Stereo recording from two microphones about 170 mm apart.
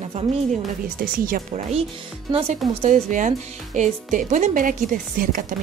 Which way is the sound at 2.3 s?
40° right (ahead or behind).